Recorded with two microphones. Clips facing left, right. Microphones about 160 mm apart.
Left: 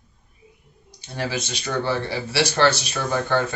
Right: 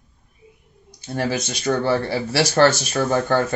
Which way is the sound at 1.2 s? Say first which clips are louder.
Right 4 dB; 45° right (ahead or behind).